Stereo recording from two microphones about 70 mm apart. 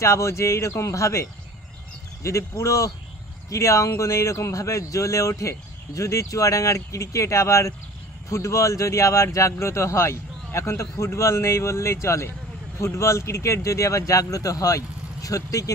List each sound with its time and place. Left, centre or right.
0.0 s speech: left